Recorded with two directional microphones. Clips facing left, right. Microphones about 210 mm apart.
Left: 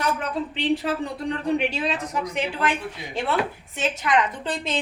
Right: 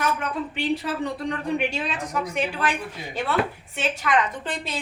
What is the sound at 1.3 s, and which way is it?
Speech, 30° left (ahead or behind).